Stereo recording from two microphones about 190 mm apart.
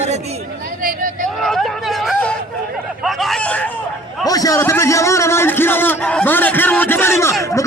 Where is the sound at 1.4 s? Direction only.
Centre (ahead or behind).